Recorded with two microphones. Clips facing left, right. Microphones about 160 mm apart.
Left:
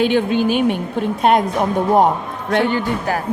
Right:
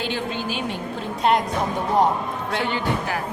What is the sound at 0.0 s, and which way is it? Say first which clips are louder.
A woman's voice: left 11 dB; 60° left (ahead or behind).